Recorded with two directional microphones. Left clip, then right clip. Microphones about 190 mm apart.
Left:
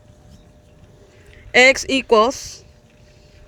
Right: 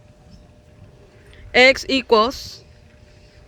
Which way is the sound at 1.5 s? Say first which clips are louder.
Left 1 dB; 20° left (ahead or behind).